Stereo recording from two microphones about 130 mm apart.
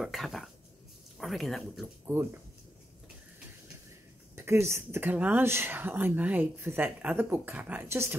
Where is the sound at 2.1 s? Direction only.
15° right (ahead or behind).